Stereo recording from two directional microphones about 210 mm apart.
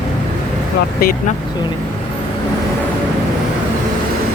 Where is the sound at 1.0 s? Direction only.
45° left (ahead or behind).